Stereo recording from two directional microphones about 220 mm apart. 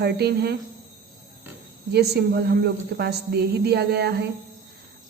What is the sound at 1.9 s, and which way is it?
A woman's voice, 50° right (ahead or behind).